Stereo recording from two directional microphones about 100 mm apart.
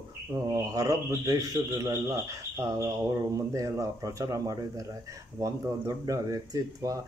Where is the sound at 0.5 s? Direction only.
35° right (ahead or behind).